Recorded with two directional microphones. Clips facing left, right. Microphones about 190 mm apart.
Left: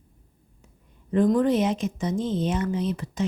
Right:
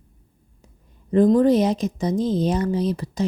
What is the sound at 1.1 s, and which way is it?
Speech, 35° right (ahead or behind).